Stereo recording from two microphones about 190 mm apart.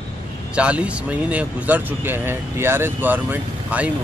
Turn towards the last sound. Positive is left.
turn(degrees=-10)  # may be behind; listen again after turning